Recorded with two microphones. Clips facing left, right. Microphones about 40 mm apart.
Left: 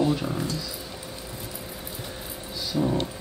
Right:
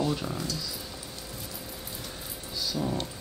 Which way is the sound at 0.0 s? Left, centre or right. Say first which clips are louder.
Left 5 dB; centre.